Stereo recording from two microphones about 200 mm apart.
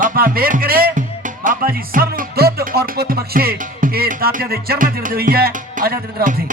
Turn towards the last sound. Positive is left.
turn(degrees=-45)  # may be behind; listen again after turning